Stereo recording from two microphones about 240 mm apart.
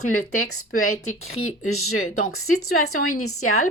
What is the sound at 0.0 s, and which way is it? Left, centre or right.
Speech, left.